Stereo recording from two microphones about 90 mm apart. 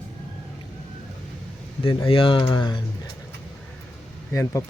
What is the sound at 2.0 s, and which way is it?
Speech, 75° left (ahead or behind).